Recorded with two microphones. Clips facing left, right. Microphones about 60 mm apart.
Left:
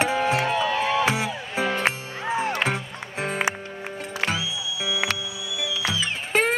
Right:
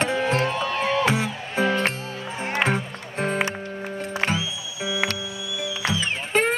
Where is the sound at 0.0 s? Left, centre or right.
Centre.